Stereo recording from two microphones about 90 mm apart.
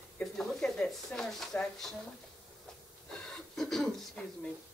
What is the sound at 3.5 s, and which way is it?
Beatboxing, 5° left (ahead or behind).